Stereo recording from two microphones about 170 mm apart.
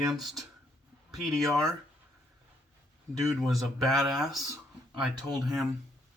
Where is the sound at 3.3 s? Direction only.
Centre (ahead or behind).